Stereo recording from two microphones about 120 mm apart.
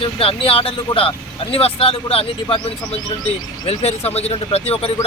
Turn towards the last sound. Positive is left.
turn(degrees=55)  # may be behind; listen again after turning